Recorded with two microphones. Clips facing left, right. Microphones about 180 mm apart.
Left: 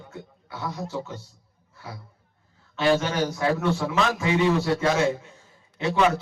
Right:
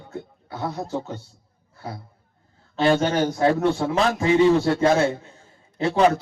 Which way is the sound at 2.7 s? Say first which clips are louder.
Right 3 dB; 35° right (ahead or behind).